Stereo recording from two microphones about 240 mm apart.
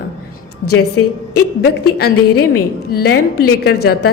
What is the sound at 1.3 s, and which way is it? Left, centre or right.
A woman's voice, left.